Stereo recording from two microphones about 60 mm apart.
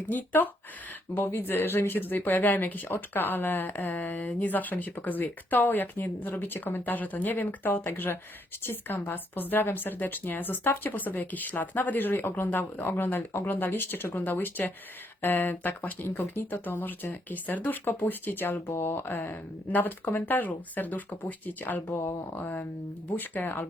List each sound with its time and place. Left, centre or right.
0.1 s speech: left
1.1 s speech: left
21.8 s speech: left
22.4 s speech: left